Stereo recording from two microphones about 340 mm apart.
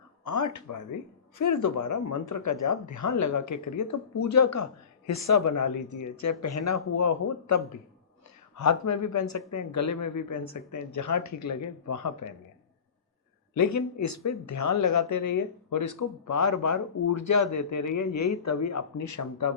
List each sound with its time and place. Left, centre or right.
0.3 s speech: left
13.5 s speech: left